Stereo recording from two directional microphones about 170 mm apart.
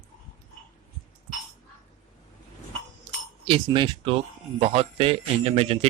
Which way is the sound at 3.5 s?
30° right (ahead or behind).